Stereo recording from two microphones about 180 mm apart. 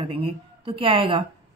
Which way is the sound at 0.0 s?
30° right (ahead or behind).